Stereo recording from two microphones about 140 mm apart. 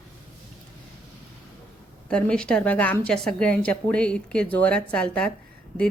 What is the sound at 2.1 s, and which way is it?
A woman's voice, 5° left (ahead or behind).